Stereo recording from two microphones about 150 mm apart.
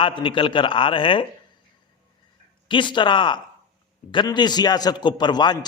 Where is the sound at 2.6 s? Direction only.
30° left (ahead or behind).